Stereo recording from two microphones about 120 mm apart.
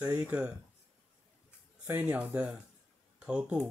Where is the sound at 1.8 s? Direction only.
15° right (ahead or behind).